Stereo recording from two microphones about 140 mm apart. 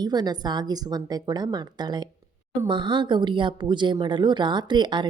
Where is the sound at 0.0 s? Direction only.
30° right (ahead or behind).